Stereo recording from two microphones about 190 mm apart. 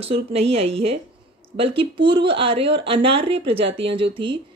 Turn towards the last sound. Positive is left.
turn(degrees=-25)  # may be behind; listen again after turning